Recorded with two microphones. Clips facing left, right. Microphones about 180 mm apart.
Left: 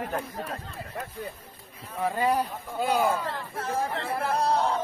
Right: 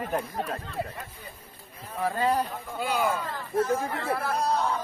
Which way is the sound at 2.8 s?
35° left (ahead or behind).